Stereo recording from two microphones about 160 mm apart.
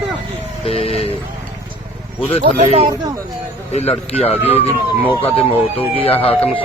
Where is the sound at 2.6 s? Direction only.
40° right (ahead or behind).